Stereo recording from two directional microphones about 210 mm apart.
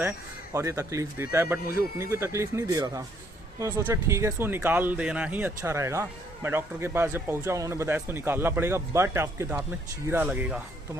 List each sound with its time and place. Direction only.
0.5 s speech: 15° right (ahead or behind)